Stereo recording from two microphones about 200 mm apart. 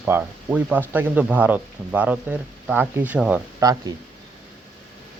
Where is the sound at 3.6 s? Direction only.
15° right (ahead or behind).